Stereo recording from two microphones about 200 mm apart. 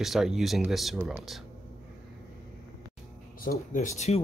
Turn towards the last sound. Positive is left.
turn(degrees=35)  # may be behind; listen again after turning